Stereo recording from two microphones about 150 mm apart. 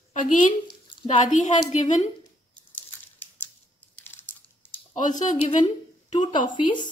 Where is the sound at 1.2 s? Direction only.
55° left (ahead or behind).